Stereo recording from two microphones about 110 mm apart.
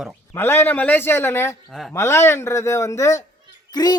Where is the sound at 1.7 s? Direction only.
Centre (ahead or behind).